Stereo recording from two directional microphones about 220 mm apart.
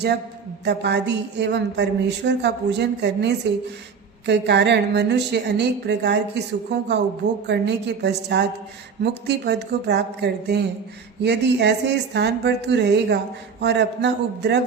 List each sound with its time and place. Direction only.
0.6 s a woman's voice: 50° right (ahead or behind)